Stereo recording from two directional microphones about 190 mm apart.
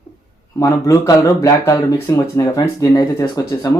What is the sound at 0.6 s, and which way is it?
Speech, 15° left (ahead or behind).